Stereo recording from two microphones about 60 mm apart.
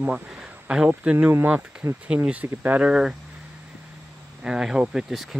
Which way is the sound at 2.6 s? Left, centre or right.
Right.